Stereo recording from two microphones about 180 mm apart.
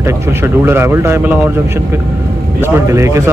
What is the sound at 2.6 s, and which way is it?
Speech, 15° right (ahead or behind).